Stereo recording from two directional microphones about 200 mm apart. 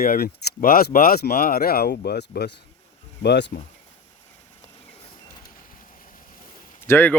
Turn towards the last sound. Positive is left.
turn(degrees=10)  # may be behind; listen again after turning